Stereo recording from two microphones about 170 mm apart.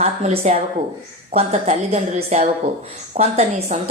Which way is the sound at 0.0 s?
40° right (ahead or behind).